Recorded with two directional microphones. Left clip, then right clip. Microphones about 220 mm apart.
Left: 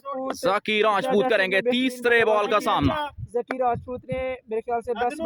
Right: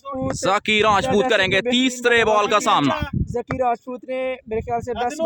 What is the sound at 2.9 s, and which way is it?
Speech, 50° right (ahead or behind).